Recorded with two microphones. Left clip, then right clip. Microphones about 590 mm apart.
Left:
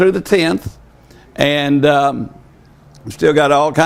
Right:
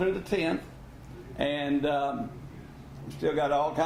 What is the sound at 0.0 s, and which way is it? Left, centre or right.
A man's voice, left.